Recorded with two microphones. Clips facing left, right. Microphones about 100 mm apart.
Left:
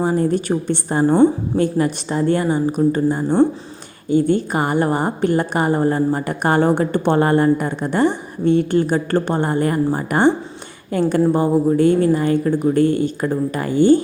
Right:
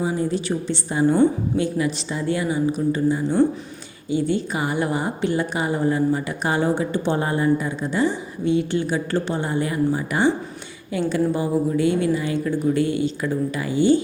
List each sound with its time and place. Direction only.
0.0 s a woman's voice: 55° left (ahead or behind)